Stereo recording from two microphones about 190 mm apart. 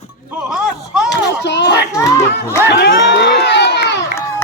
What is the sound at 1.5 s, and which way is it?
Speech, 60° left (ahead or behind).